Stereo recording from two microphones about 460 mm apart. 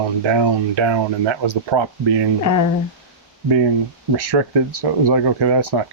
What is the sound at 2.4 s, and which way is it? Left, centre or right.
Speech, left.